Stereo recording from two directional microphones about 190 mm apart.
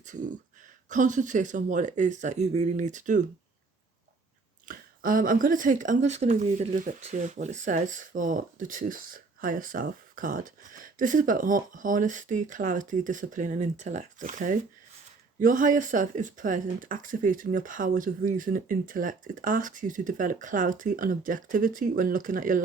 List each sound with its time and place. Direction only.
0.0 s speech: 40° right (ahead or behind)
4.6 s speech: 45° right (ahead or behind)